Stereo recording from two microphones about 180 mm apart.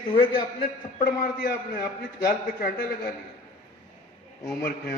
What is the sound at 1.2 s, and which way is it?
A man's voice, 50° left (ahead or behind).